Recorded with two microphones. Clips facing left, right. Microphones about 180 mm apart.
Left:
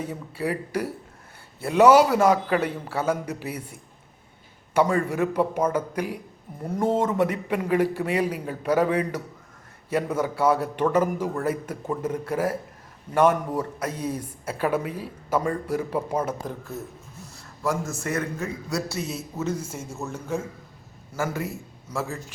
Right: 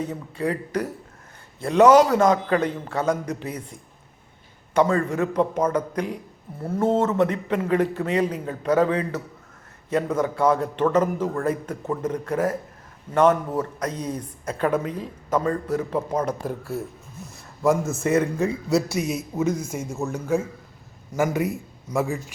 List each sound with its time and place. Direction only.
0.0 s speech: 10° left (ahead or behind)
16.5 s speech: 10° right (ahead or behind)
17.3 s a man's voice: 20° right (ahead or behind)